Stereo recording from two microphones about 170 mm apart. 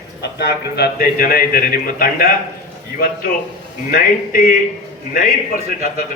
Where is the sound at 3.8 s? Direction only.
55° left (ahead or behind).